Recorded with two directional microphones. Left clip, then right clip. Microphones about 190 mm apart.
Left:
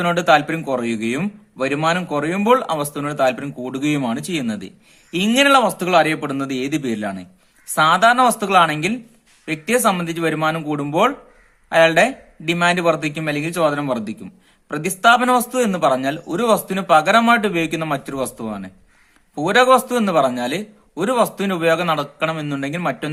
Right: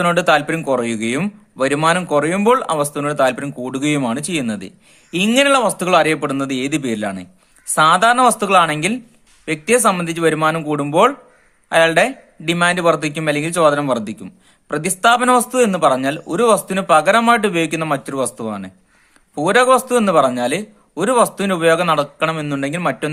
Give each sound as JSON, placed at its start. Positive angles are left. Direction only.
{"t": 0.0, "sound": "a man's voice", "side_deg": -25}